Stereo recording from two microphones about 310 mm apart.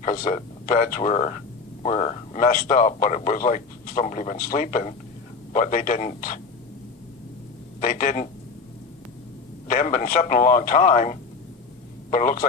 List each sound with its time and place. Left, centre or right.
0.0 s a man's voice: left
7.8 s a man's voice: left
9.6 s a man's voice: left